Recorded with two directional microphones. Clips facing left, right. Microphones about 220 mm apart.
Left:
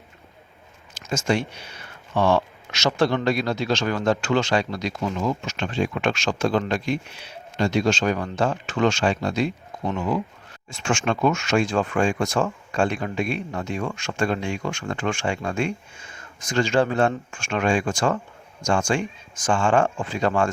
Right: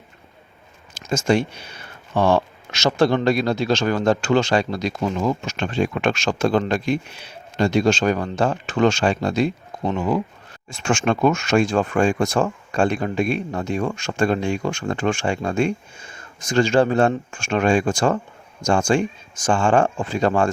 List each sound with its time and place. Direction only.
1.1 s speech: 40° right (ahead or behind)
10.8 s speech: 50° right (ahead or behind)